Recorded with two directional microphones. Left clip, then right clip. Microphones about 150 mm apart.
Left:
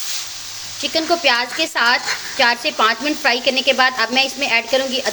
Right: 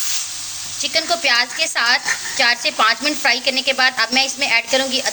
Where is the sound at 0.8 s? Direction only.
35° left (ahead or behind).